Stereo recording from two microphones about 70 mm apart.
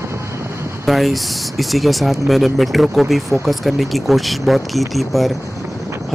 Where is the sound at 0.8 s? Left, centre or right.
Centre.